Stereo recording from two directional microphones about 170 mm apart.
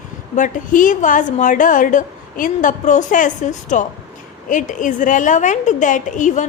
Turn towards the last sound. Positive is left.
turn(degrees=45)  # may be behind; listen again after turning